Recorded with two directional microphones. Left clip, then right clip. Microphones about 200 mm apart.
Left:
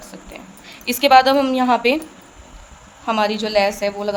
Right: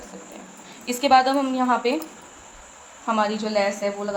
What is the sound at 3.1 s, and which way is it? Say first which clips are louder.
A woman's voice: left 4 dB; 45° left (ahead or behind).